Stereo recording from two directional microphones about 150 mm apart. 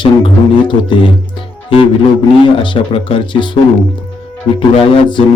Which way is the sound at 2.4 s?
35° left (ahead or behind).